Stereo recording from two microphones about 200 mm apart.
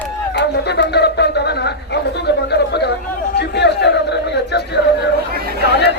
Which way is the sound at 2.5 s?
55° left (ahead or behind).